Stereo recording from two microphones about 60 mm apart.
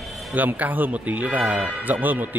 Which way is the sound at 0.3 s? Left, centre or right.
Right.